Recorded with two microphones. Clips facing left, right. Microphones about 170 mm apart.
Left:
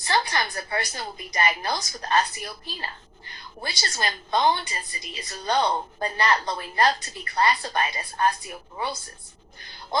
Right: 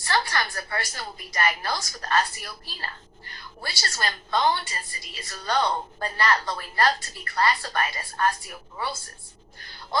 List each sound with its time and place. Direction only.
0.0 s a woman's voice: 20° left (ahead or behind)